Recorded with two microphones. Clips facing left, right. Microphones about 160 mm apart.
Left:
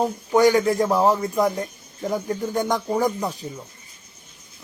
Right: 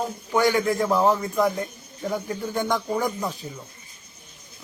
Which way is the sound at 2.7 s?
15° left (ahead or behind).